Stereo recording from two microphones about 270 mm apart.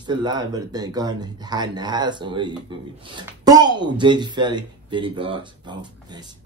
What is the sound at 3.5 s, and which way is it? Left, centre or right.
Speech, centre.